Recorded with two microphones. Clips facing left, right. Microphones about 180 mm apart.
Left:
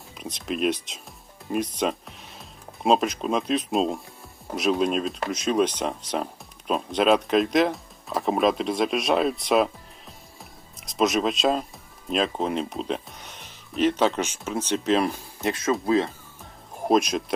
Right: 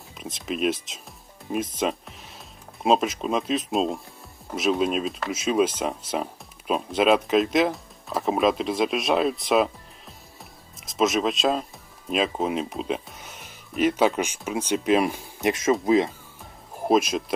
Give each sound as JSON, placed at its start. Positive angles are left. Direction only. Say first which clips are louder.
{"t": 0.2, "sound": "speech", "louder": "even", "side_deg": 0}
{"t": 10.8, "sound": "speech", "louder": "even", "side_deg": 0}
{"t": 16.8, "sound": "speech", "louder": "even", "side_deg": -5}